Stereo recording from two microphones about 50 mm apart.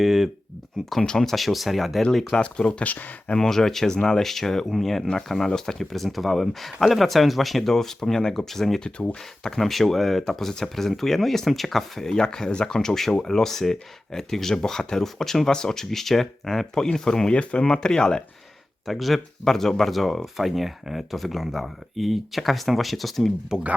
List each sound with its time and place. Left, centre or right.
0.0 s speech: centre
1.0 s speech: centre
2.3 s speech: centre
2.6 s speech: left
3.3 s speech: centre
18.9 s speech: centre
23.5 s speech: centre